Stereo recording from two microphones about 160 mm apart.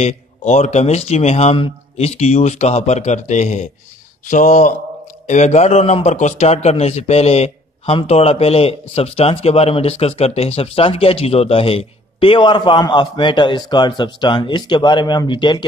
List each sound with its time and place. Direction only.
0.0 s a man's voice: 45° left (ahead or behind); by 15.6 s 30° left (ahead or behind)